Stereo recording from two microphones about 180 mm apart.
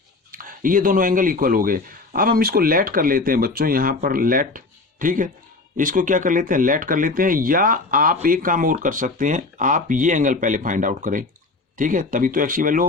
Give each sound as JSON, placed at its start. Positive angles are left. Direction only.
{"t": 0.3, "sound": "speech", "side_deg": -50}